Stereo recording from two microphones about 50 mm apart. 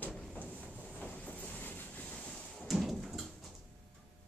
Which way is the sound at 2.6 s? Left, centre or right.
Centre.